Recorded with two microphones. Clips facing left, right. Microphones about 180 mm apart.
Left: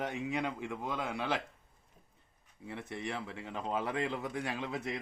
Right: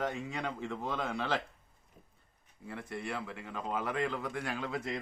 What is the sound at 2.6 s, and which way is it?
Speech, 25° left (ahead or behind).